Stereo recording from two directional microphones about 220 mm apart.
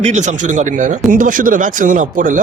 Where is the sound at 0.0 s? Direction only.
30° right (ahead or behind).